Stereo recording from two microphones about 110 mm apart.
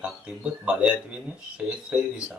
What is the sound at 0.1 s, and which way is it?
Speech, 5° right (ahead or behind).